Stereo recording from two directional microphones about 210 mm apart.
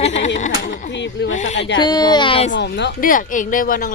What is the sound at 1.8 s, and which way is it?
Speech, 20° left (ahead or behind).